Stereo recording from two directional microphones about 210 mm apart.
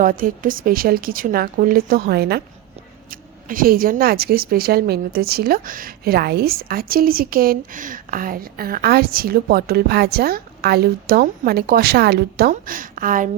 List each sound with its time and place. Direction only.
0.0 s speech: 40° right (ahead or behind)